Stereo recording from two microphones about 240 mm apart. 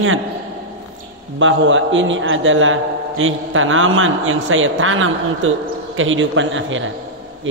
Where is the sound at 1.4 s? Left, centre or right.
Right.